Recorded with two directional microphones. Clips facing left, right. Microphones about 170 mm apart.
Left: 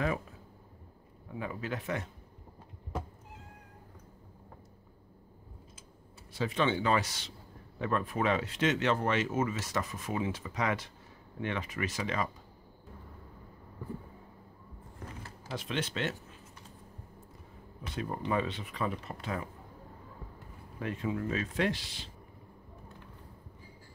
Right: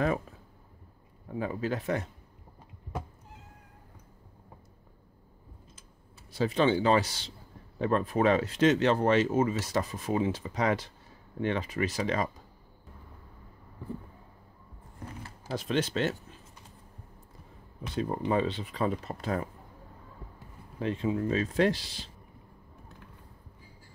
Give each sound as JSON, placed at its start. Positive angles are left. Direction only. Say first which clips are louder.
{"t": 1.3, "sound": "speech", "louder": "right 6 dB", "side_deg": -35}
{"t": 6.3, "sound": "speech", "louder": "right 5 dB", "side_deg": -35}
{"t": 15.5, "sound": "speech", "louder": "right 6 dB", "side_deg": -40}
{"t": 17.9, "sound": "speech", "louder": "right 4 dB", "side_deg": -30}
{"t": 20.8, "sound": "speech", "louder": "right 5 dB", "side_deg": -25}